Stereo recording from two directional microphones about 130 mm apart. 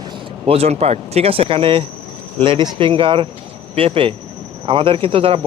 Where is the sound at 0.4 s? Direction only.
50° right (ahead or behind).